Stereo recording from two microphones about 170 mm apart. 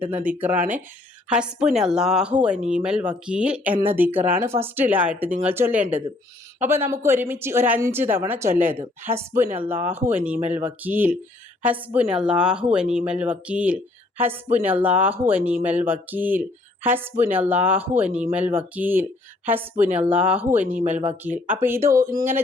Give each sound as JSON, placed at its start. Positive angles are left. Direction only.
{"t": 0.0, "sound": "speech", "side_deg": -10}
{"t": 20.9, "sound": "speech", "side_deg": -40}
{"t": 21.2, "sound": "speech", "side_deg": -10}